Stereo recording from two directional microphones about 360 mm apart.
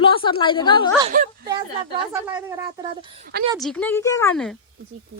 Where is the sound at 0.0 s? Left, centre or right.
Centre.